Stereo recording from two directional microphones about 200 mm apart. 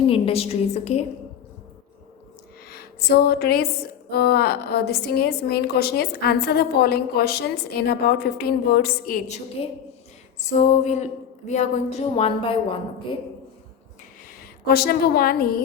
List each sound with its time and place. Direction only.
0.1 s speech: 30° left (ahead or behind)
2.6 s a woman's voice: 50° left (ahead or behind)
10.4 s speech: 35° left (ahead or behind)
14.7 s a woman's voice: 50° left (ahead or behind)